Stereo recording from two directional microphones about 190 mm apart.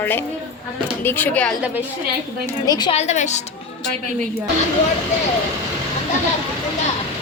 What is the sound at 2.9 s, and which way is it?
Speech, 40° left (ahead or behind).